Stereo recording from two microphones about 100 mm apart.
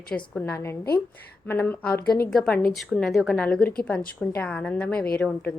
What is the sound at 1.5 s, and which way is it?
Speech, 15° left (ahead or behind).